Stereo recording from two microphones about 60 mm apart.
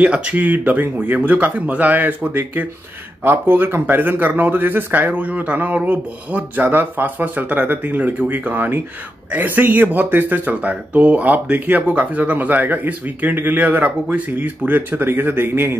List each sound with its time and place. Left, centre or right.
0.0 s speech: centre
0.5 s speech: right